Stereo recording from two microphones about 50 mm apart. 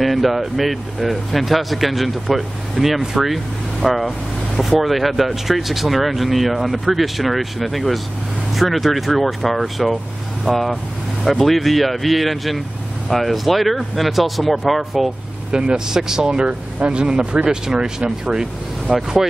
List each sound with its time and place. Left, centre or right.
0.0 s speech: centre
15.5 s speech: centre